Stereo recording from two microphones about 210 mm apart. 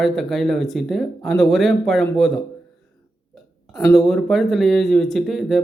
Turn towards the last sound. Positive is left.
turn(degrees=0)  # may be behind; listen again after turning